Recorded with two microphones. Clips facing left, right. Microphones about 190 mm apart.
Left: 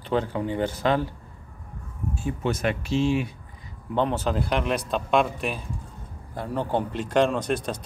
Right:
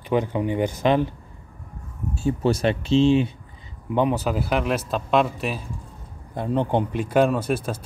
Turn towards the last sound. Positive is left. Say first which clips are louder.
# right 2 dB
turn(degrees=-5)  # may be behind; listen again after turning